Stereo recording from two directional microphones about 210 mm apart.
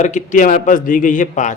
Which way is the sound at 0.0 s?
35° left (ahead or behind).